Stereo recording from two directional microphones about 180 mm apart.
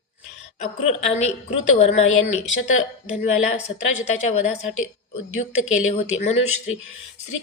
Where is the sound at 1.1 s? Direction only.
35° left (ahead or behind).